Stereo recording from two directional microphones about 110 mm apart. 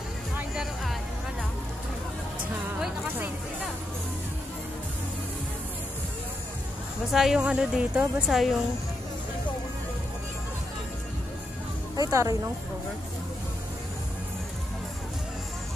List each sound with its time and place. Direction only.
7.1 s speech: 5° right (ahead or behind)
12.0 s speech: 30° right (ahead or behind)